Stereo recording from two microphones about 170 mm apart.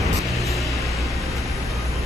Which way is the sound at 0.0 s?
Centre (ahead or behind).